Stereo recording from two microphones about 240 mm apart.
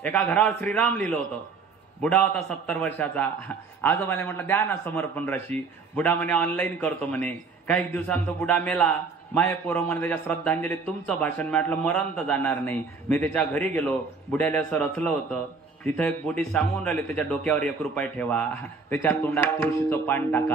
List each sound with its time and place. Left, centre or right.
0.0 s a man's voice: centre